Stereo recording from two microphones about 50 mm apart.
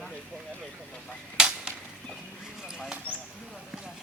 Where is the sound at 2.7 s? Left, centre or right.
Centre.